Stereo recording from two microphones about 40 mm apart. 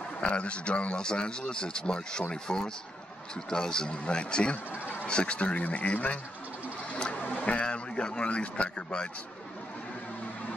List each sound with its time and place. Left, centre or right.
0.2 s speech: left
7.3 s speech: left